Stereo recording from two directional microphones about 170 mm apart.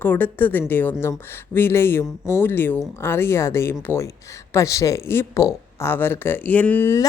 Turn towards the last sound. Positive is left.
turn(degrees=15)  # may be behind; listen again after turning